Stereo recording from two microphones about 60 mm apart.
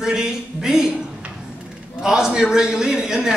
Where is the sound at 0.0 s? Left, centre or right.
Centre.